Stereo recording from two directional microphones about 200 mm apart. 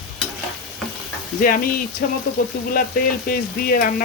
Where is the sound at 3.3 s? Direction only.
45° left (ahead or behind).